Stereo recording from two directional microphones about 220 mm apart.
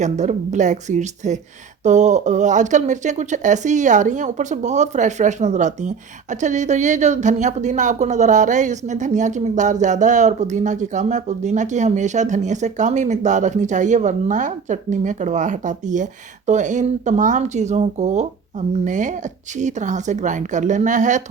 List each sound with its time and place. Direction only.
0.0 s speech: 30° right (ahead or behind)